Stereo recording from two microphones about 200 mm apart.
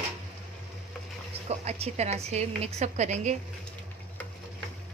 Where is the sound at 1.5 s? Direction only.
35° right (ahead or behind).